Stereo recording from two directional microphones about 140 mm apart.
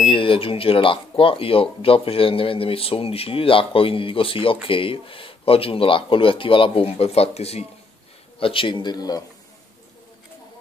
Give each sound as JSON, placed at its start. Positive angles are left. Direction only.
{"t": 0.0, "sound": "speech", "side_deg": 40}